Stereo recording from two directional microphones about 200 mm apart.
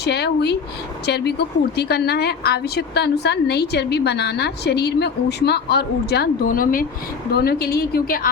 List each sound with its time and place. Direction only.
0.0 s a woman's voice: 55° left (ahead or behind)